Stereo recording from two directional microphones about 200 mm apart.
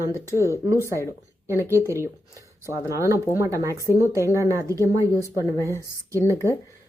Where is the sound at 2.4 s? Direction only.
15° right (ahead or behind).